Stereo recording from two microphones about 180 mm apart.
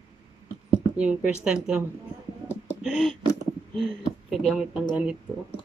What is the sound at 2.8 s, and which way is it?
Speech, centre (ahead or behind).